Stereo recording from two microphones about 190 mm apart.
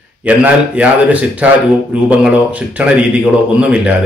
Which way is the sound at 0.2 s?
5° right (ahead or behind).